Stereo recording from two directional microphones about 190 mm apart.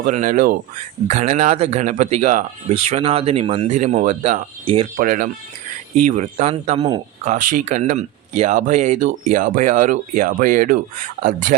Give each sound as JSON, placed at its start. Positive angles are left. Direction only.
{"t": 0.0, "sound": "speech", "side_deg": -40}
{"t": 4.9, "sound": "speech", "side_deg": -45}
{"t": 6.7, "sound": "speech", "side_deg": -20}
{"t": 7.3, "sound": "speech", "side_deg": -40}